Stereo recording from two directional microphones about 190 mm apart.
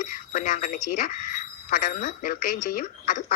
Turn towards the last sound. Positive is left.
turn(degrees=50)  # may be behind; listen again after turning